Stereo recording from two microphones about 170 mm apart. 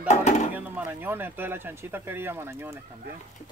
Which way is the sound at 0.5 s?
10° right (ahead or behind).